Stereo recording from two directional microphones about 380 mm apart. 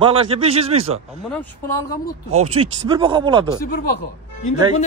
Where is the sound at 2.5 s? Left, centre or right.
Centre.